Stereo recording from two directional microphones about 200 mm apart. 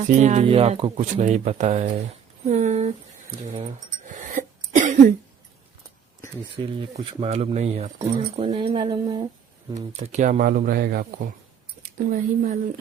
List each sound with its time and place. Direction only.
0.2 s speech: 35° right (ahead or behind)
3.5 s a sound: 35° right (ahead or behind)
6.6 s speech: 25° right (ahead or behind)
9.7 s speech: 35° right (ahead or behind)